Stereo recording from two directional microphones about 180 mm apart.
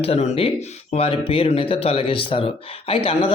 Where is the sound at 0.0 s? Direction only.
35° left (ahead or behind).